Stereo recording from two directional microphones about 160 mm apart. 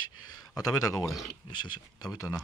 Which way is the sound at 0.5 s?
20° left (ahead or behind).